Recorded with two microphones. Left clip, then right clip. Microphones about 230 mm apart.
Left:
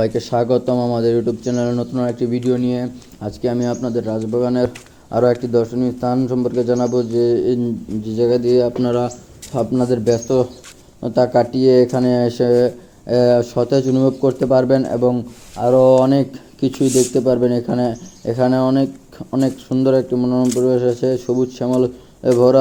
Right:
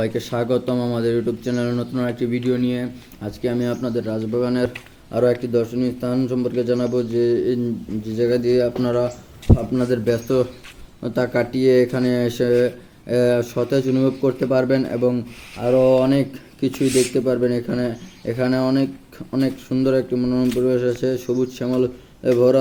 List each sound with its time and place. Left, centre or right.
0.0 s a man's voice: centre
16.0 s a man's voice: centre
16.8 s speech: left
17.2 s a man's voice: centre